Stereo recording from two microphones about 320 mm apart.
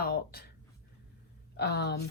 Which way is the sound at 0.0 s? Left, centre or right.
Left.